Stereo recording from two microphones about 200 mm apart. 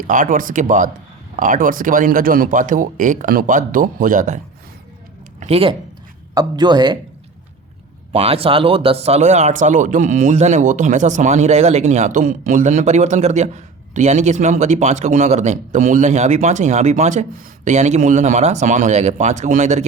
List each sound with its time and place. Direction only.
0.1 s speech: 40° right (ahead or behind)
5.4 s speech: 30° right (ahead or behind)
8.1 s speech: 30° right (ahead or behind)